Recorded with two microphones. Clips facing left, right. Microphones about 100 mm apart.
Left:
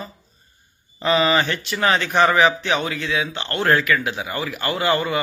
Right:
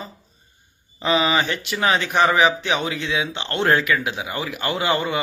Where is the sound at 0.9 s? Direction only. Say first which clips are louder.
Left 2 dB; 15° right (ahead or behind).